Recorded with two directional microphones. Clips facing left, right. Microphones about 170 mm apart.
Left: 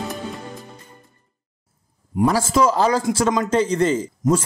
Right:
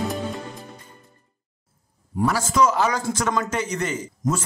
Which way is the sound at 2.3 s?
30° left (ahead or behind).